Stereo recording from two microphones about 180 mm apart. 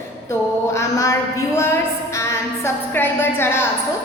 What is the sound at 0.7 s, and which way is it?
A woman's voice, 15° left (ahead or behind).